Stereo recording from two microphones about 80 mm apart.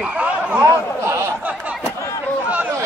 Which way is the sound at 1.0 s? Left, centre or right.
Right.